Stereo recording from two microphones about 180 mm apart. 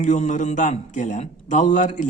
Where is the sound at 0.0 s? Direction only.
45° left (ahead or behind).